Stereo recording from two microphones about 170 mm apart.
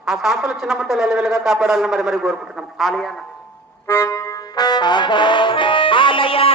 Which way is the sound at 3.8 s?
15° left (ahead or behind).